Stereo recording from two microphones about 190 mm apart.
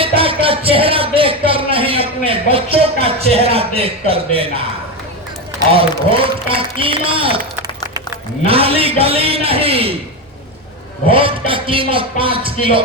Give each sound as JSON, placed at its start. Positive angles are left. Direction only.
{"t": 0.2, "sound": "a sound", "side_deg": -30}
{"t": 5.7, "sound": "speech", "side_deg": -30}
{"t": 8.4, "sound": "a man's voice", "side_deg": -30}
{"t": 11.1, "sound": "speech", "side_deg": -30}